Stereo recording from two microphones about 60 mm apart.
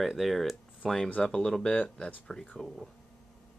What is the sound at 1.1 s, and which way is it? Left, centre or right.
Speech, centre.